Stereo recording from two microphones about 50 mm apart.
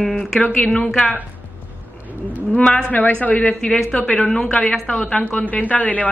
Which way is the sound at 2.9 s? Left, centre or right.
Left.